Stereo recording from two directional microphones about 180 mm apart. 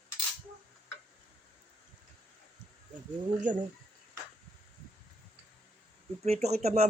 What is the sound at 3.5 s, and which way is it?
Speech, 45° right (ahead or behind).